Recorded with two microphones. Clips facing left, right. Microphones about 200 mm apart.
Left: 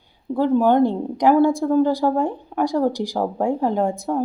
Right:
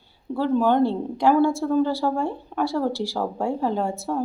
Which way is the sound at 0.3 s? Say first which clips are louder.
Left 3 dB; 15° left (ahead or behind).